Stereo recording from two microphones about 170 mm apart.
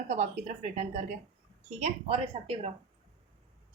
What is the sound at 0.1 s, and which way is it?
A woman's voice, 45° right (ahead or behind).